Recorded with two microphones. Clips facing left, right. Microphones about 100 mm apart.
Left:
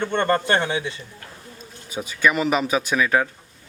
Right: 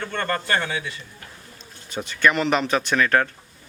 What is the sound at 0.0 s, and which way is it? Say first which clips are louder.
Speech: left 6 dB; 25° left (ahead or behind).